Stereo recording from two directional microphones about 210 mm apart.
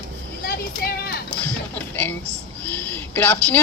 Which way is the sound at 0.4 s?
45° left (ahead or behind).